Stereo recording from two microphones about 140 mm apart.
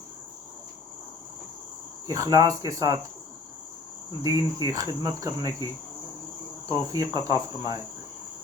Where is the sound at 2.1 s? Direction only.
25° right (ahead or behind).